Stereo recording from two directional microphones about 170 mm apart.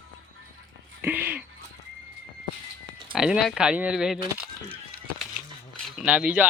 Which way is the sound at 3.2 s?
5° right (ahead or behind).